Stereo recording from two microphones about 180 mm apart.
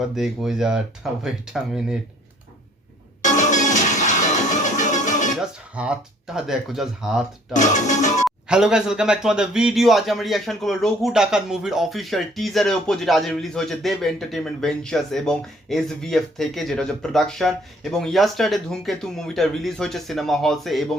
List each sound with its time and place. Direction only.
0.1 s a man's voice: centre (ahead or behind)
3.2 s music: 45° left (ahead or behind)
5.7 s a man's voice: 5° right (ahead or behind)
7.5 s speech: 40° left (ahead or behind)
8.4 s a man's voice: 5° right (ahead or behind)